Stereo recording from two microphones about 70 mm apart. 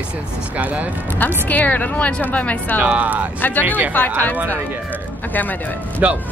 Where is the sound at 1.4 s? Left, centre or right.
Left.